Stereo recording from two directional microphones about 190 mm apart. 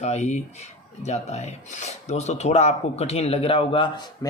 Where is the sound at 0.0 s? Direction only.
40° left (ahead or behind).